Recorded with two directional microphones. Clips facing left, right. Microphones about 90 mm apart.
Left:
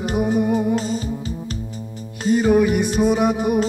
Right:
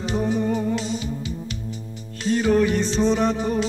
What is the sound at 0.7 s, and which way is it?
Music, 40° left (ahead or behind).